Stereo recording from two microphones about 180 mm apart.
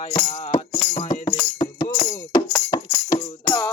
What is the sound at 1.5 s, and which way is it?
Music, 20° left (ahead or behind).